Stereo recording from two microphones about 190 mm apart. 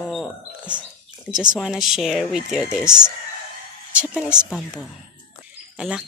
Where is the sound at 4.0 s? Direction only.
5° right (ahead or behind).